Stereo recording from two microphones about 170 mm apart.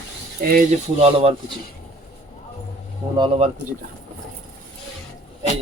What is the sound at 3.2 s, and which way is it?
Speech, 35° right (ahead or behind).